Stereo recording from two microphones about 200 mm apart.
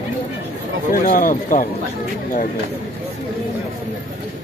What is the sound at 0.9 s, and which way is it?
Speech, 40° left (ahead or behind).